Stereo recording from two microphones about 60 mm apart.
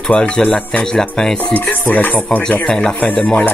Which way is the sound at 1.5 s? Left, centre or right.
Left.